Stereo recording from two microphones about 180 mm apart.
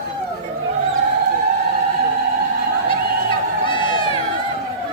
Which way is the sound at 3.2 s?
25° left (ahead or behind).